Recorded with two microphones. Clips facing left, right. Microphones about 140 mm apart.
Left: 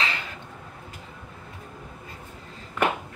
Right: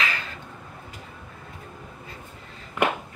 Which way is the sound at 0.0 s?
20° left (ahead or behind).